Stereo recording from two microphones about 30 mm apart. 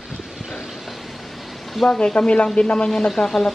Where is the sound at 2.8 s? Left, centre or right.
Left.